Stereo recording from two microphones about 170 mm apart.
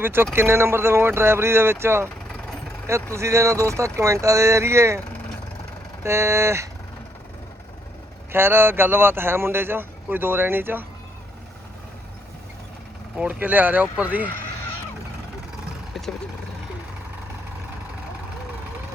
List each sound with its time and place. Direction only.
0.0 s speech: 15° right (ahead or behind)
3.2 s speech: 15° right (ahead or behind)
6.0 s speech: 15° right (ahead or behind)
8.3 s speech: 15° right (ahead or behind)
13.1 s speech: 10° right (ahead or behind)